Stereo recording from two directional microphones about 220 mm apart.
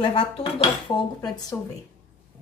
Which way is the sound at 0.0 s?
25° left (ahead or behind).